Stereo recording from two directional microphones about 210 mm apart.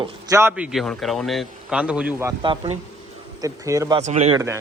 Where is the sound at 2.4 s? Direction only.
25° right (ahead or behind).